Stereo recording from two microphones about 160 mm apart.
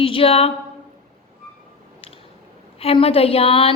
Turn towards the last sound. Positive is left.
turn(degrees=35)  # may be behind; listen again after turning